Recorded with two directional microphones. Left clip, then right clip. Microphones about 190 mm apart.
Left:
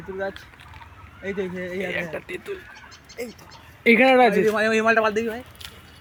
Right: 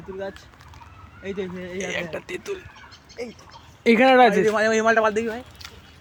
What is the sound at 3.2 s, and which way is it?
Speech, 70° left (ahead or behind).